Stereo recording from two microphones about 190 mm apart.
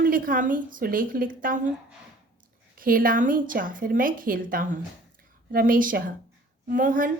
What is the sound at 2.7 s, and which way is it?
A woman's voice, 45° right (ahead or behind).